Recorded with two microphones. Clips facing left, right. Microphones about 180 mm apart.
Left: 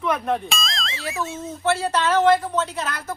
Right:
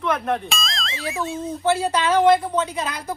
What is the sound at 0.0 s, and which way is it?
Speech, centre (ahead or behind).